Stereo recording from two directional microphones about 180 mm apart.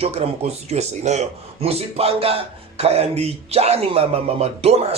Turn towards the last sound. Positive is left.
turn(degrees=-35)  # may be behind; listen again after turning